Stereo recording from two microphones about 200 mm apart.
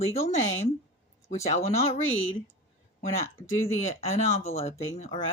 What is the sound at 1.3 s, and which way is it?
Speech, 35° left (ahead or behind).